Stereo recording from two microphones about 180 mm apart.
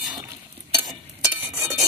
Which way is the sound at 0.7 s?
20° right (ahead or behind).